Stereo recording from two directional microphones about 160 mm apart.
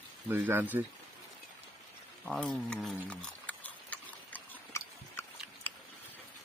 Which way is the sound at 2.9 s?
10° left (ahead or behind).